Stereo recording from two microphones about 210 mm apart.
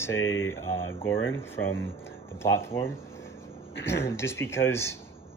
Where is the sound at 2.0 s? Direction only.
10° left (ahead or behind).